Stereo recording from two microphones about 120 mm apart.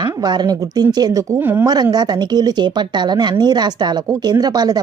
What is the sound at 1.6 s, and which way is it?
Speech, 35° right (ahead or behind).